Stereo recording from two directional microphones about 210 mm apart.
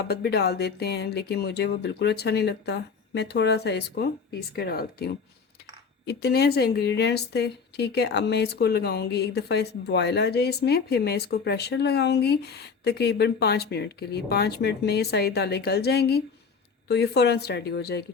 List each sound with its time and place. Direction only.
0.0 s a woman's voice: 50° left (ahead or behind)